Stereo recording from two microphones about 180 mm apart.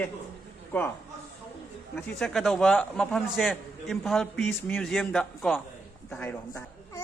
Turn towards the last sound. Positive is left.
turn(degrees=5)  # may be behind; listen again after turning